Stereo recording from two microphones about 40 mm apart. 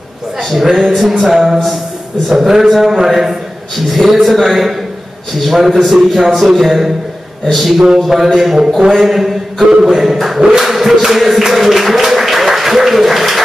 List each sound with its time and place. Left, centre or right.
0.4 s speech: centre
7.7 s speech: centre
8.5 s a man's voice: centre
10.6 s music: centre